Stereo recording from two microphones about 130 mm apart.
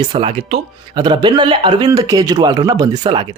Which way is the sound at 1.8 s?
25° right (ahead or behind).